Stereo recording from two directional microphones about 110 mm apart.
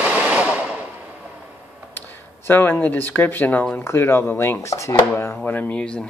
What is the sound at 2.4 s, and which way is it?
Speech, 20° left (ahead or behind).